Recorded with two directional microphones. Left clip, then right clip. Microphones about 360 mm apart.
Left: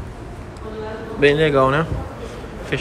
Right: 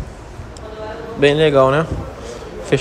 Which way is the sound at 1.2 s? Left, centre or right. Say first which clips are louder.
Right 3 dB; centre.